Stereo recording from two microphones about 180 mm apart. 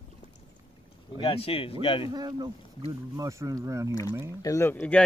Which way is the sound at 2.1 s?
20° right (ahead or behind).